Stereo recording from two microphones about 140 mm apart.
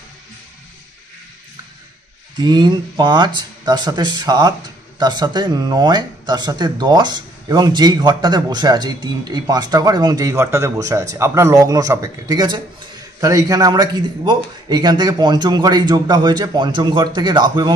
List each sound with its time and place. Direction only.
2.3 s a man's voice: 30° right (ahead or behind)